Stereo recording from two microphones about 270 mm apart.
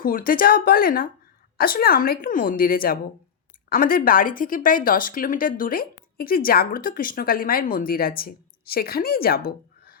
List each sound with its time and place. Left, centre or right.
0.0 s a woman's voice: left